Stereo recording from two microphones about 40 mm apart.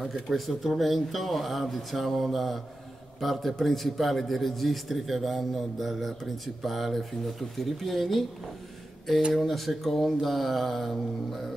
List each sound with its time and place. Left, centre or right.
0.1 s a man's voice: centre
9.3 s a man's voice: centre